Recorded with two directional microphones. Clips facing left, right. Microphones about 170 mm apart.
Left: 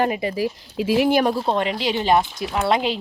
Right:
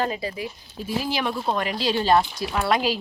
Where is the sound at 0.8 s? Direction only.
80° left.